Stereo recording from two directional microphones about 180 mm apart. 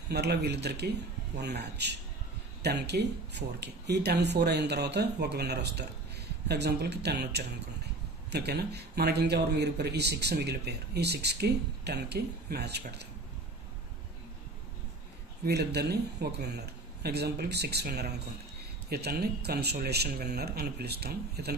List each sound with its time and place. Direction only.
0.1 s speech: 65° right (ahead or behind)
15.4 s speech: 65° right (ahead or behind)